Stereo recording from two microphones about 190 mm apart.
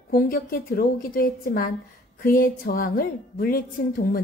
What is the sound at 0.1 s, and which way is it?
A woman's voice, 50° left (ahead or behind).